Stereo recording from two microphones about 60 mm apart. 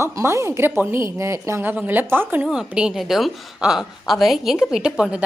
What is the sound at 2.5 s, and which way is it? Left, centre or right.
Speech, centre.